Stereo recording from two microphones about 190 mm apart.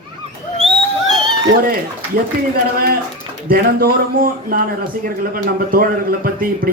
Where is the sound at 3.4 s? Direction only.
50° right (ahead or behind).